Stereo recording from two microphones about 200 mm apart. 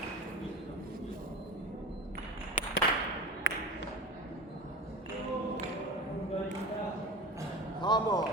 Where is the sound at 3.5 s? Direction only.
65° left (ahead or behind).